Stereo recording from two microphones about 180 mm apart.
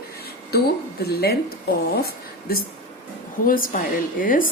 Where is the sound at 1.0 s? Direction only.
60° left (ahead or behind).